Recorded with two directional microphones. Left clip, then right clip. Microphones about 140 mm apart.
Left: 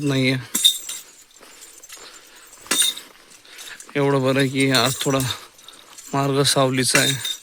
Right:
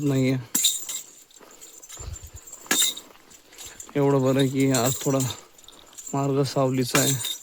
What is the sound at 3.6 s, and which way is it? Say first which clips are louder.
Speech: left 2 dB; 5° right (ahead or behind).